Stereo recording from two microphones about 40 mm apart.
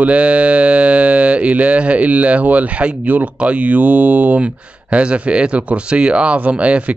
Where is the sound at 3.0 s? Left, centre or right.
Right.